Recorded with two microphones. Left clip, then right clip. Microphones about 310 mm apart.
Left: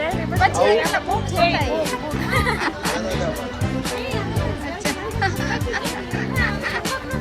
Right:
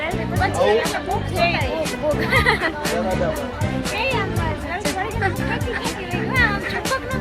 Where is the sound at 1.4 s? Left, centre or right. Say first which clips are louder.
Left 1 dB; left.